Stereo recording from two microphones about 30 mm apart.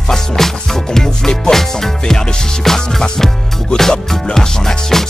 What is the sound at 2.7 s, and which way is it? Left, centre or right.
Music, centre.